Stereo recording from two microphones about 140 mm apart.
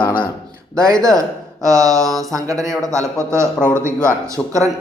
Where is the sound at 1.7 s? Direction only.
25° right (ahead or behind).